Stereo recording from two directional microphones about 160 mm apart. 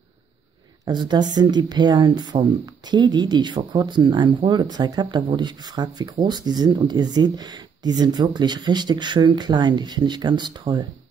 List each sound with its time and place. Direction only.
0.8 s speech: 25° right (ahead or behind)